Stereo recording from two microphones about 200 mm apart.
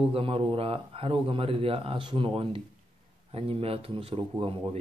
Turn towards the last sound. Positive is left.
turn(degrees=-30)  # may be behind; listen again after turning